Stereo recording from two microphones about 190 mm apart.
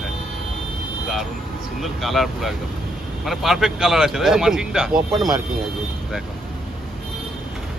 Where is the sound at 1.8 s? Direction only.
Centre (ahead or behind).